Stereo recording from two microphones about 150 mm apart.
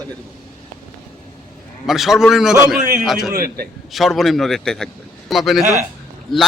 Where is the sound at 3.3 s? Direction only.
75° right (ahead or behind).